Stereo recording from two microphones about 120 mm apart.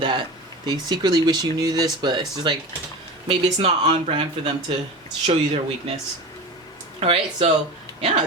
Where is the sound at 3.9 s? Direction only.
45° right (ahead or behind).